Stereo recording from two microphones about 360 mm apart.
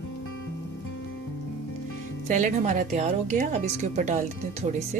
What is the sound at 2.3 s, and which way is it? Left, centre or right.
A woman's voice, centre.